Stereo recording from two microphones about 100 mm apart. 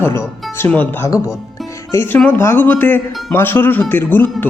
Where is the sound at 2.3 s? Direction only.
20° left (ahead or behind).